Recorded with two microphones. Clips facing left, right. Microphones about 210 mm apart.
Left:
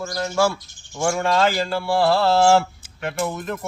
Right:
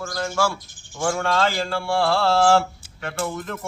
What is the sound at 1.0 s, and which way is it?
Speech, 10° left (ahead or behind).